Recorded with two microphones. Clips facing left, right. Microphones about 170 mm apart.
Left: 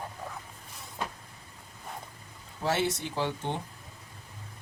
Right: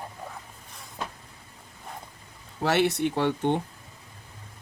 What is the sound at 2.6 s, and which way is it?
Speech, 70° right (ahead or behind).